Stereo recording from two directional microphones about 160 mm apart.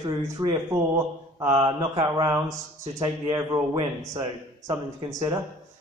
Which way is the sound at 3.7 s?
20° right (ahead or behind).